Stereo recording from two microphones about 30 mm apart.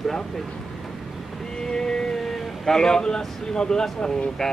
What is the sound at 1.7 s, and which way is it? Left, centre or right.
Music, left.